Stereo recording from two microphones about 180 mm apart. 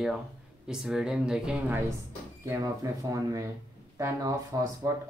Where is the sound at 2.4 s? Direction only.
20° right (ahead or behind).